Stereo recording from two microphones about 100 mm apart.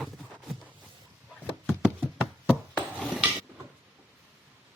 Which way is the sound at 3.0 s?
10° right (ahead or behind).